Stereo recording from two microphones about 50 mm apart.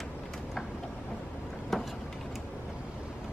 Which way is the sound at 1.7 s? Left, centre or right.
Centre.